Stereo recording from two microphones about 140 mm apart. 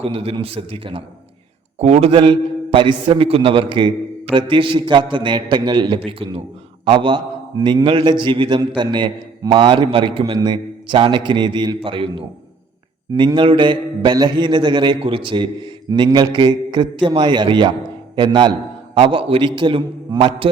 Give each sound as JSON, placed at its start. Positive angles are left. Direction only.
{"t": 0.0, "sound": "a man's voice", "side_deg": -45}